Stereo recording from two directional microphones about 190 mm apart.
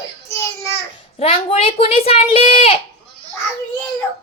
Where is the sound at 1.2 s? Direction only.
30° left (ahead or behind).